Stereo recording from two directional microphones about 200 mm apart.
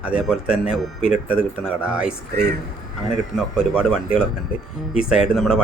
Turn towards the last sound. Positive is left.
turn(degrees=-5)  # may be behind; listen again after turning